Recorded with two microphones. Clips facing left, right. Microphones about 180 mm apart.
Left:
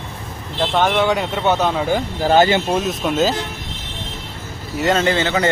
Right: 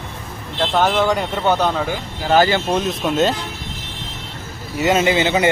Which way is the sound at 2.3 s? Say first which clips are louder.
Left 1 dB; 25° left (ahead or behind).